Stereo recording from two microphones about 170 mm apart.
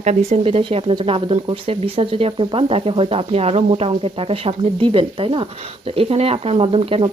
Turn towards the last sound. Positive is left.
turn(degrees=-35)  # may be behind; listen again after turning